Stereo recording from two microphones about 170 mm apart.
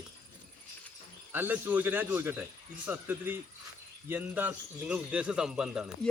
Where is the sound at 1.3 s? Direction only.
10° right (ahead or behind).